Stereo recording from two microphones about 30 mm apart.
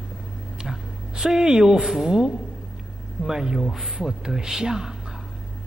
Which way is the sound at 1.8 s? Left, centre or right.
Centre.